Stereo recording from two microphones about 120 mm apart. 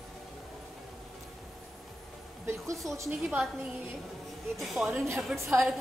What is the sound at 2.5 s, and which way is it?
Speech, 25° right (ahead or behind).